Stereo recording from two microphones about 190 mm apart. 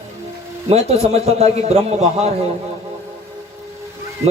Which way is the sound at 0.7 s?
35° right (ahead or behind).